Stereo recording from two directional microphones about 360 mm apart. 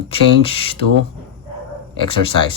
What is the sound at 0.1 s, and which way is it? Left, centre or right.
Speech, centre.